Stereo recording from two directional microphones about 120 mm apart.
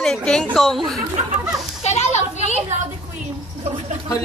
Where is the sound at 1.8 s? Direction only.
65° left (ahead or behind).